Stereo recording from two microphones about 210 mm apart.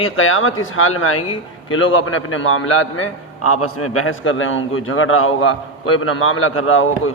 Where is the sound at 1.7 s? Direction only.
70° left (ahead or behind).